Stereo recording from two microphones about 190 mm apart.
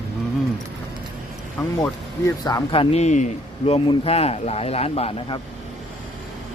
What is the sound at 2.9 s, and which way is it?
Speech, 35° left (ahead or behind).